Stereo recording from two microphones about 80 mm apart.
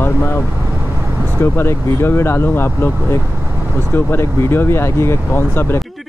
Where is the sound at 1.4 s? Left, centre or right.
Left.